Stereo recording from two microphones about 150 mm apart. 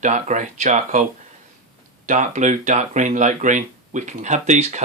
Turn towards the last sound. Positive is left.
turn(degrees=-50)  # may be behind; listen again after turning